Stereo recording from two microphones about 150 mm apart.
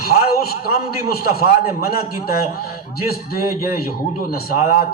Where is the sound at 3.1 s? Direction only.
85° left.